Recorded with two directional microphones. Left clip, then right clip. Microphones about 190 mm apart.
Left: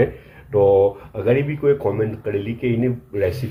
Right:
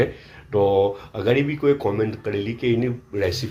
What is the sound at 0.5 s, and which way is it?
Speech, 15° right (ahead or behind).